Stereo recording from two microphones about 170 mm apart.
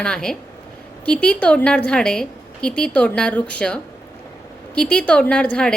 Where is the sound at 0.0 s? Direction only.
5° left (ahead or behind).